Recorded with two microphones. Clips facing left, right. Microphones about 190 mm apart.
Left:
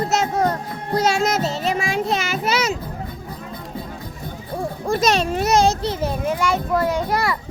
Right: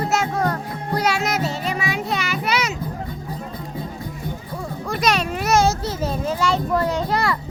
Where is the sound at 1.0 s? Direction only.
25° left (ahead or behind).